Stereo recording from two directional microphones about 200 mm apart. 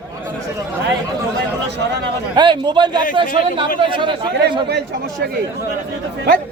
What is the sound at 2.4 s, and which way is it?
A man's voice, 25° right (ahead or behind).